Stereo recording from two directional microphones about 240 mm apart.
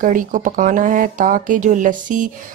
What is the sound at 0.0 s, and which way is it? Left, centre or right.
Speech, right.